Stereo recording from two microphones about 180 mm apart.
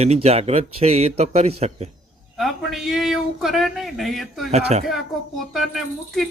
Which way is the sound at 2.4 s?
Centre (ahead or behind).